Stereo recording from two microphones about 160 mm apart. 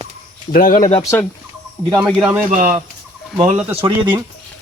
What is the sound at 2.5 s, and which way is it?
Speech, 55° right (ahead or behind).